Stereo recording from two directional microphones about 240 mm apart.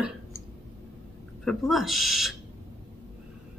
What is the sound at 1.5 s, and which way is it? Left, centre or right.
Speech, centre.